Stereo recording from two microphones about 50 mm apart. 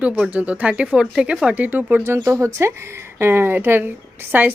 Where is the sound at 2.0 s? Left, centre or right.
Right.